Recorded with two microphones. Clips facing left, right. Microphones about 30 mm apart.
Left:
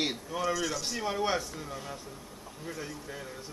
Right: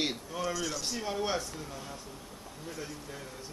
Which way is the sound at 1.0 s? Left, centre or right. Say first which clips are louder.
Left 3 dB; centre.